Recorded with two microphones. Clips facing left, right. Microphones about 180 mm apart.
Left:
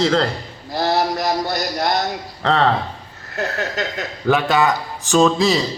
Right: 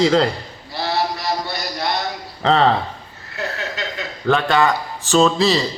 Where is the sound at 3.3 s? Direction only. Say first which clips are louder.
Left 4 dB; 45° left (ahead or behind).